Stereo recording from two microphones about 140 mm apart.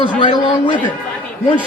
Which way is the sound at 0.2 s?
35° left (ahead or behind).